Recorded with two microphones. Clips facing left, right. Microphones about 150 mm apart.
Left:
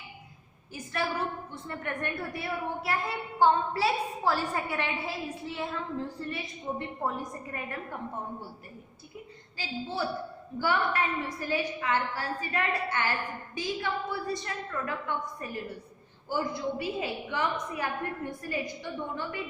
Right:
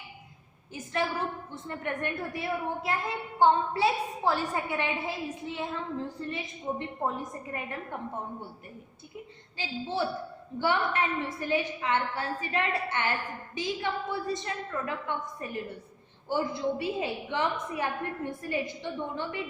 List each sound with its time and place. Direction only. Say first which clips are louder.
1.6 s a woman's voice: right 2 dB; 20° right (ahead or behind)
9.6 s a woman's voice: right 2 dB; 25° right (ahead or behind)